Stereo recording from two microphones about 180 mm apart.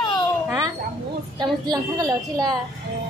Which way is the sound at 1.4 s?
20° right (ahead or behind).